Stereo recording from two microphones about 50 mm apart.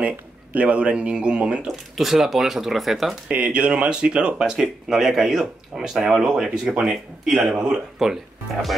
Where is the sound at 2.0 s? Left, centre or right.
Centre.